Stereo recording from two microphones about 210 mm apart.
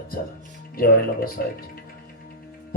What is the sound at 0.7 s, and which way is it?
Speech, 45° left (ahead or behind).